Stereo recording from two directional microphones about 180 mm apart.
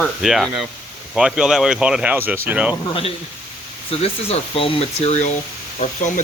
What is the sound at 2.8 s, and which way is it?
Speech, 30° left (ahead or behind).